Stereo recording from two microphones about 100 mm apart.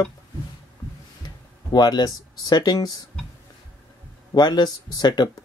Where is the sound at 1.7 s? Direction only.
45° left (ahead or behind).